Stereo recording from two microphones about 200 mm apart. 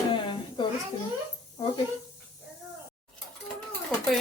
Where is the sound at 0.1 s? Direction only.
25° left (ahead or behind).